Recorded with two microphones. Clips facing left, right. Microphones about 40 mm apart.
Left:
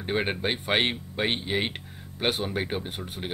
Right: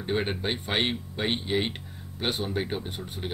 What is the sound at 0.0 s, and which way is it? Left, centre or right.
Speech, left.